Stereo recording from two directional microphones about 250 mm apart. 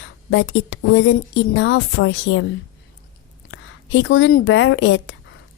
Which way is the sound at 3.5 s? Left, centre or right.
Left.